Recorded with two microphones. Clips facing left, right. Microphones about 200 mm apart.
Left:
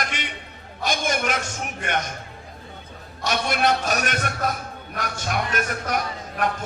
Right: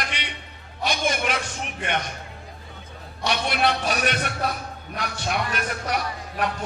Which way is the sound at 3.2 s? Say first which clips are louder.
Left 1 dB; 45° left (ahead or behind).